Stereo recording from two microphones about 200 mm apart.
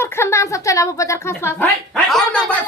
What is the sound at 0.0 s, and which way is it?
Speech, 15° left (ahead or behind).